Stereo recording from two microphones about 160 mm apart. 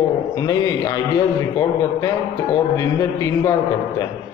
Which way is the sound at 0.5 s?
20° left (ahead or behind).